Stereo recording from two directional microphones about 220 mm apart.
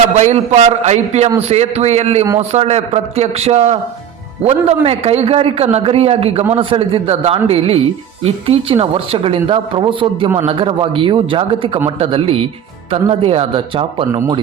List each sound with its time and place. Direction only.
0.2 s a man's voice: 30° right (ahead or behind)